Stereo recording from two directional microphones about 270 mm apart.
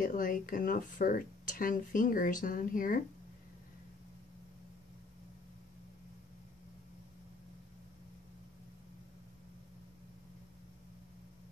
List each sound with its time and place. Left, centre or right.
0.0 s speech: left